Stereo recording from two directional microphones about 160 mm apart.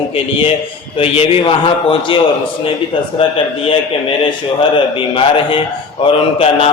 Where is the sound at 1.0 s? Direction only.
35° left (ahead or behind).